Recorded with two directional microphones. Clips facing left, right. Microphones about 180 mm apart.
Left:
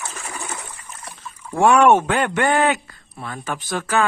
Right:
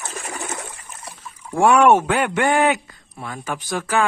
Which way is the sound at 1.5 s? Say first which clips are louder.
Even; 10° right (ahead or behind).